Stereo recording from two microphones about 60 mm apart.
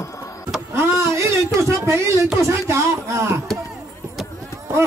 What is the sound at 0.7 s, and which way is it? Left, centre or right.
Power windows, right.